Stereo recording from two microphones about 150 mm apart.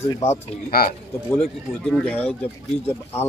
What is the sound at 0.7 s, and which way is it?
Speech, 85° left.